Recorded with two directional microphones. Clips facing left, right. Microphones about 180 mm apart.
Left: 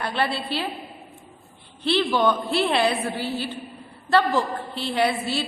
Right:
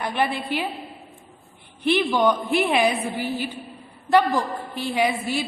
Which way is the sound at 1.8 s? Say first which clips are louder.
Right 1 dB; 15° right (ahead or behind).